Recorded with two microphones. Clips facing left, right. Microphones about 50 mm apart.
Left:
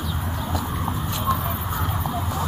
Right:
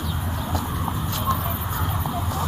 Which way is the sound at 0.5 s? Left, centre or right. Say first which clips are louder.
Even; centre.